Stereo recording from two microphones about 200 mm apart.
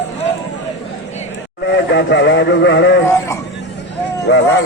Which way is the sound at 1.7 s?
60° left (ahead or behind).